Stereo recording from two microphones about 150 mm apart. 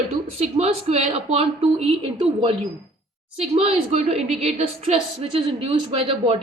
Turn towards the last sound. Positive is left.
turn(degrees=-40)  # may be behind; listen again after turning